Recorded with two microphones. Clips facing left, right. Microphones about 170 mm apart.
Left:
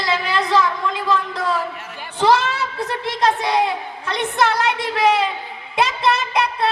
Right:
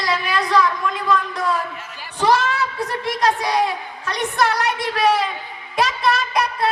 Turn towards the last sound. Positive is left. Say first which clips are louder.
# left 1 dB
turn(degrees=25)  # may be behind; listen again after turning